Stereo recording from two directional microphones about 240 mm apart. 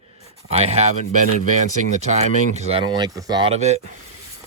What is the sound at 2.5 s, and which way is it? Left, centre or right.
Speech, right.